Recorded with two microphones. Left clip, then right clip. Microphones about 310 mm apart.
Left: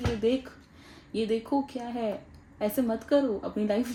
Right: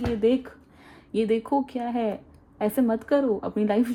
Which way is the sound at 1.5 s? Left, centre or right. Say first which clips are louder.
Right 4 dB; right.